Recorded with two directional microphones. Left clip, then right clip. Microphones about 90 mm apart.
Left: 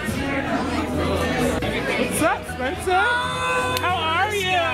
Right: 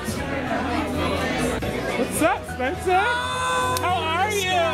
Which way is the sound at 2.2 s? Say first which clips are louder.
Even; 35° right (ahead or behind).